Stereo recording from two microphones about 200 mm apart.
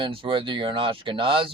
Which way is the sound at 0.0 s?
25° right (ahead or behind).